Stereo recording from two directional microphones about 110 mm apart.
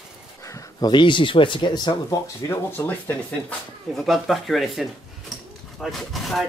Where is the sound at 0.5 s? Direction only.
30° left (ahead or behind).